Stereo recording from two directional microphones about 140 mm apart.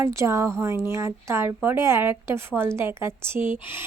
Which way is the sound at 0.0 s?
20° right (ahead or behind).